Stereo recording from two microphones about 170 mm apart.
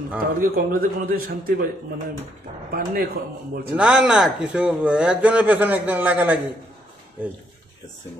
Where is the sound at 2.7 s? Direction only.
60° right (ahead or behind).